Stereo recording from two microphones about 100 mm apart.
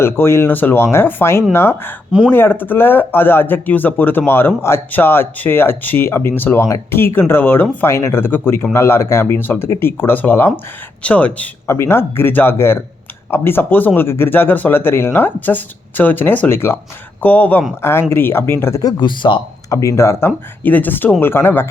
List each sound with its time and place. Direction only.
0.0 s speech: 25° left (ahead or behind)
11.7 s speech: 25° left (ahead or behind)
18.8 s speech: 45° left (ahead or behind)
19.7 s speech: 30° left (ahead or behind)